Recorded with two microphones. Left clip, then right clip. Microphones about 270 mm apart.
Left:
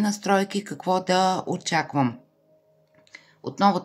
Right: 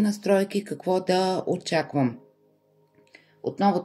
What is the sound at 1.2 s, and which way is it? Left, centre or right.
Speech, left.